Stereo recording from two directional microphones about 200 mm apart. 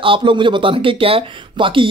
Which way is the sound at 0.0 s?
25° right (ahead or behind).